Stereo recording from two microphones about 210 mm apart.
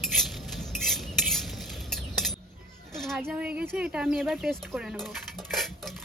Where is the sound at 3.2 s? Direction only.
5° right (ahead or behind).